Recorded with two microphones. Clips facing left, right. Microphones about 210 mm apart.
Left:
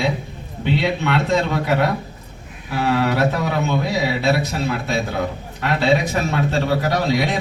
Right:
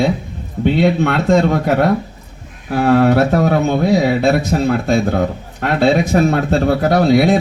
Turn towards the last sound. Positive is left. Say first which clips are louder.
# right 8 dB
turn(degrees=-45)  # may be behind; listen again after turning